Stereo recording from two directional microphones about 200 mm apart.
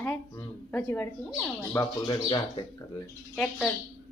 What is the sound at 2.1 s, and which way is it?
Speech, 20° left (ahead or behind).